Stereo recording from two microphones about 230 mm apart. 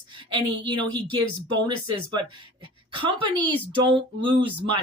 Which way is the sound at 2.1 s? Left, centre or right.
Right.